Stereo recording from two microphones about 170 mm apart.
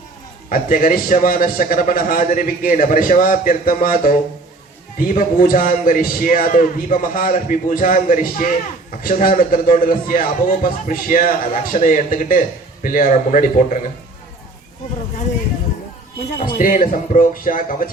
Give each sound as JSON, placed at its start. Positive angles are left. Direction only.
{"t": 0.5, "sound": "a man's voice", "side_deg": 55}
{"t": 16.6, "sound": "a man's voice", "side_deg": 55}